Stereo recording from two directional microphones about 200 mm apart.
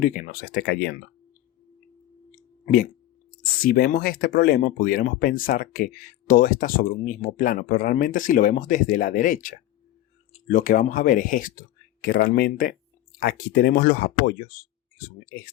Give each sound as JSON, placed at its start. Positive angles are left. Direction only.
{"t": 0.0, "sound": "speech", "side_deg": 45}
{"t": 3.6, "sound": "speech", "side_deg": 45}